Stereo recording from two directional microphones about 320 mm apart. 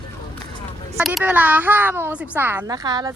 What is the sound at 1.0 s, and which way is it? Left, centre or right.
Speech, centre.